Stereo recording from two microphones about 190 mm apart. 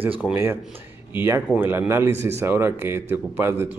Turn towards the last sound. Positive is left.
turn(degrees=-10)  # may be behind; listen again after turning